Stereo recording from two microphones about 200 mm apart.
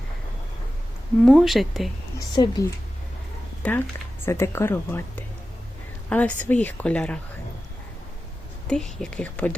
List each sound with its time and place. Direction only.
1.2 s speech: centre (ahead or behind)
2.3 s a woman's voice: 20° left (ahead or behind)
8.6 s speech: 5° left (ahead or behind)